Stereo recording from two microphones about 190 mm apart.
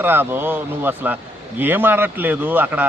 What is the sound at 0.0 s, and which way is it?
A man's voice, 10° right (ahead or behind).